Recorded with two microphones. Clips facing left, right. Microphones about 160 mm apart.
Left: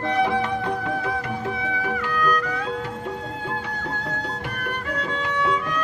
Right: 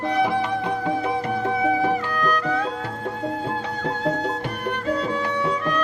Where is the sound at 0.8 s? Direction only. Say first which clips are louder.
Right 3 dB; 25° right (ahead or behind).